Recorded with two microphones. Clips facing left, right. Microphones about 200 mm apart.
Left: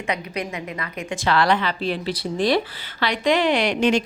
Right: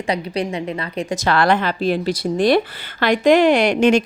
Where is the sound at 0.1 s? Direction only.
30° right (ahead or behind).